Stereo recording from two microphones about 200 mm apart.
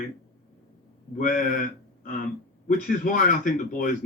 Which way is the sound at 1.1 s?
40° left (ahead or behind).